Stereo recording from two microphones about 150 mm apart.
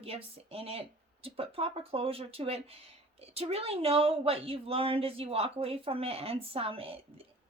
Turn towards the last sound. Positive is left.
turn(degrees=-40)  # may be behind; listen again after turning